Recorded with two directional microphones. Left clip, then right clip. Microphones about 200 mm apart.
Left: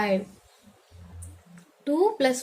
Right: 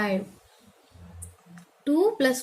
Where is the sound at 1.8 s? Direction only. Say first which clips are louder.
Even; 15° right (ahead or behind).